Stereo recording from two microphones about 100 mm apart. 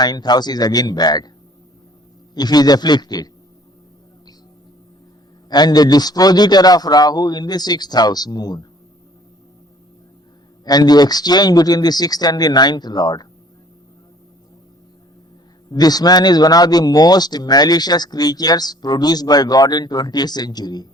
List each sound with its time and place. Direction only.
0.0 s a man's voice: 45° left (ahead or behind)
2.3 s a man's voice: 45° left (ahead or behind)
5.5 s a man's voice: 45° left (ahead or behind)
10.7 s a man's voice: 40° left (ahead or behind)
15.7 s a man's voice: 40° left (ahead or behind)